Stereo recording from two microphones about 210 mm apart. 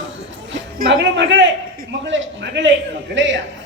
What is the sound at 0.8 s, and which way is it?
A man's voice, 60° right (ahead or behind).